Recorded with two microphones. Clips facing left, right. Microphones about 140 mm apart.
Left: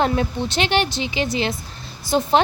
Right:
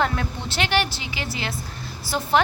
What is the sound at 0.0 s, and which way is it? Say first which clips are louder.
A woman's voice: left 5 dB; 20° left (ahead or behind).